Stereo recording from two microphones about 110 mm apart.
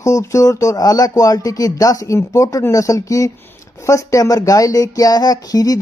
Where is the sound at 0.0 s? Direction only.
30° left (ahead or behind).